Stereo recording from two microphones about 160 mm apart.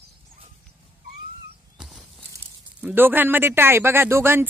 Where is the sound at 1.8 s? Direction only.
5° right (ahead or behind).